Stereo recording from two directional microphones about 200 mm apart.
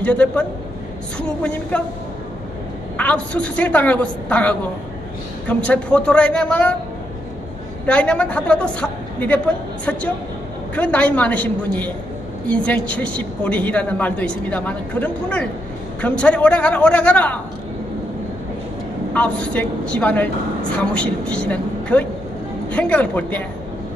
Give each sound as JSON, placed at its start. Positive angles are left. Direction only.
{"t": 0.0, "sound": "a woman's voice", "side_deg": 5}
{"t": 3.0, "sound": "a woman's voice", "side_deg": 5}
{"t": 7.8, "sound": "a woman's voice", "side_deg": 5}
{"t": 10.7, "sound": "a woman's voice", "side_deg": 5}
{"t": 19.1, "sound": "a woman's voice", "side_deg": 5}